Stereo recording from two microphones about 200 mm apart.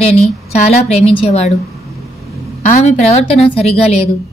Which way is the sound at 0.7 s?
30° left (ahead or behind).